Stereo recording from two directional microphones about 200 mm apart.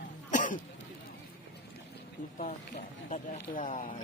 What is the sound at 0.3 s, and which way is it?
Cough, 40° left (ahead or behind).